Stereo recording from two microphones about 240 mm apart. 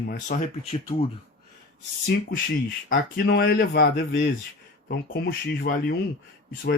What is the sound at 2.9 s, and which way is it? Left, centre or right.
Speech, left.